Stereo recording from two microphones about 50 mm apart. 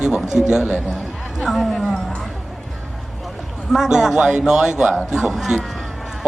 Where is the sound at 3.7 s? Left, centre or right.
Centre.